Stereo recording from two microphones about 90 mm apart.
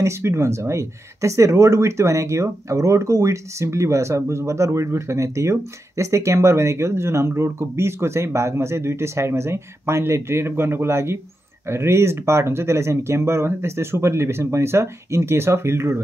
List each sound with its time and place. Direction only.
0.0 s speech: 30° right (ahead or behind)